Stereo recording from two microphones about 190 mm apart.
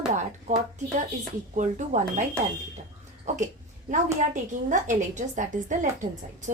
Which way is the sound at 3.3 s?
40° right (ahead or behind).